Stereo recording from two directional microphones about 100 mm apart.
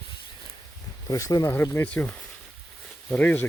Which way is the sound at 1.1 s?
40° left (ahead or behind).